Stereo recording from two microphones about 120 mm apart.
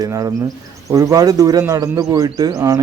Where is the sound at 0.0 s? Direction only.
25° right (ahead or behind).